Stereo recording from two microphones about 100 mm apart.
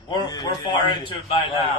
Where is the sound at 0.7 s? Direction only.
60° left (ahead or behind).